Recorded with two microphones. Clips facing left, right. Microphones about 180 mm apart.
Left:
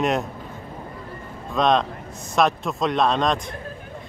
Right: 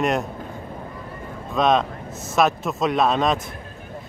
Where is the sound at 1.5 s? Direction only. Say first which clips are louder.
Right 1 dB; centre (ahead or behind).